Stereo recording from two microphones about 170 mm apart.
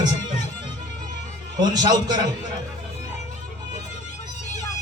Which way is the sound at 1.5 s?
25° right (ahead or behind).